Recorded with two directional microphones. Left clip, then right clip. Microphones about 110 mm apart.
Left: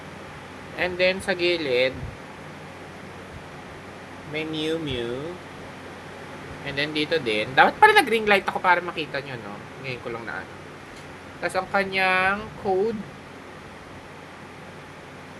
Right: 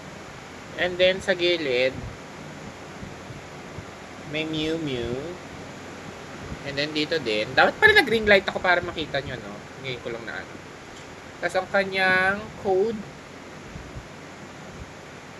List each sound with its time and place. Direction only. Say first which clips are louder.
0.8 s speech: right 1 dB; 30° left (ahead or behind)
4.4 s speech: even; 35° left (ahead or behind)
6.7 s speech: left 1 dB; 25° left (ahead or behind)
11.4 s speech: right 1 dB; 30° left (ahead or behind)